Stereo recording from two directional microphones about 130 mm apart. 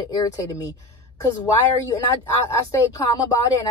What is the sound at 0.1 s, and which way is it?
Speech, 30° left (ahead or behind).